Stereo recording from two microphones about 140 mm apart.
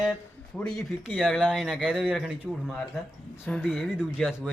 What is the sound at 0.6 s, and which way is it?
Speech, centre (ahead or behind).